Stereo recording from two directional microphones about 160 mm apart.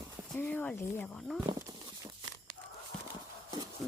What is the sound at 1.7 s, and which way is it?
Tearing, 30° right (ahead or behind).